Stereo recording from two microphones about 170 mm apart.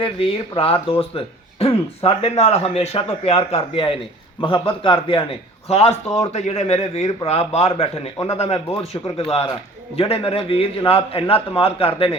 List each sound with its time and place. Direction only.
0.5 s a man's voice: 35° left (ahead or behind)
5.9 s a man's voice: 20° left (ahead or behind)
6.3 s speech: 40° left (ahead or behind)